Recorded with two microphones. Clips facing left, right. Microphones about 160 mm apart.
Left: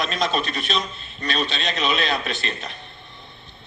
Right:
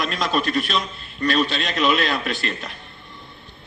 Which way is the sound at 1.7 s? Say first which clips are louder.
Right 3 dB; 55° right (ahead or behind).